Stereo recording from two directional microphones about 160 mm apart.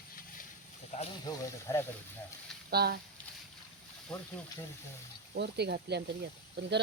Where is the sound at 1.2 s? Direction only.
20° left (ahead or behind).